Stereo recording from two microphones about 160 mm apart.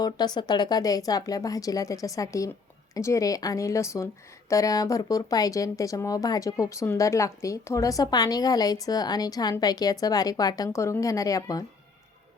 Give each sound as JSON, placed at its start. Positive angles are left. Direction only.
{"t": 0.0, "sound": "a woman's voice", "side_deg": 25}